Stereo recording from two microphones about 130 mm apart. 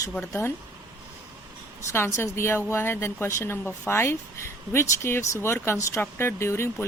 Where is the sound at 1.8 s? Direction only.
20° left (ahead or behind).